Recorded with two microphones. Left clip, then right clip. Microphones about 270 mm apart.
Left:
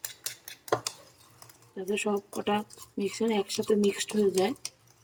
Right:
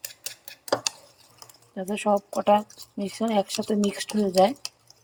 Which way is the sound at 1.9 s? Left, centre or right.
Centre.